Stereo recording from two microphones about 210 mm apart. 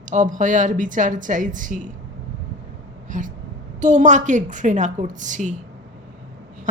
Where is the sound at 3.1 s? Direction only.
35° right (ahead or behind).